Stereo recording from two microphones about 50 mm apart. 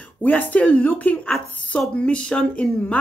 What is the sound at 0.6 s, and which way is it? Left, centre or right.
Speech, left.